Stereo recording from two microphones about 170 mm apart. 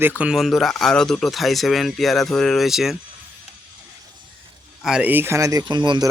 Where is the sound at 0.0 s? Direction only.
10° right (ahead or behind).